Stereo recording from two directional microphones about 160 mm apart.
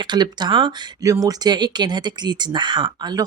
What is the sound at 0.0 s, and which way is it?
Speech, 25° right (ahead or behind).